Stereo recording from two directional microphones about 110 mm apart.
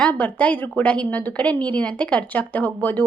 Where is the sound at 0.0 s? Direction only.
10° left (ahead or behind).